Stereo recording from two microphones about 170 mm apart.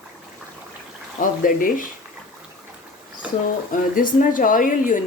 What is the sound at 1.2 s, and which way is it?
Speech, 55° left (ahead or behind).